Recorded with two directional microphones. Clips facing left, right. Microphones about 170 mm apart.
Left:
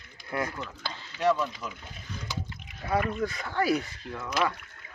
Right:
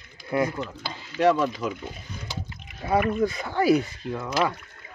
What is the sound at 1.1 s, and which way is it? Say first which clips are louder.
Speech: right 5 dB; 85° right.